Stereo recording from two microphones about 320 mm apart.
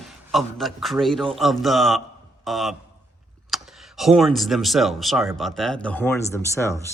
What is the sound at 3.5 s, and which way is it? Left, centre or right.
Typing, centre.